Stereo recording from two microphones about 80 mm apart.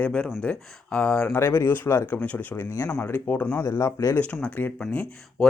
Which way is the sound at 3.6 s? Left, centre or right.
Left.